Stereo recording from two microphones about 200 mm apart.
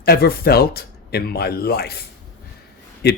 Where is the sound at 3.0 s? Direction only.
55° left (ahead or behind).